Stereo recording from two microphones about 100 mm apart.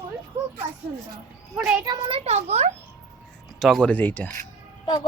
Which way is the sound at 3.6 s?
Centre (ahead or behind).